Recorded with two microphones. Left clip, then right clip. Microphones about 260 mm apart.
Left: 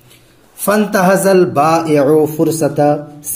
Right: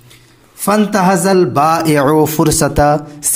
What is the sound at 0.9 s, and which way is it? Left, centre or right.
Speech, centre.